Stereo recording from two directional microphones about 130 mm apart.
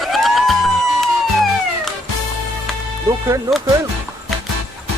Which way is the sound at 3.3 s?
25° right (ahead or behind).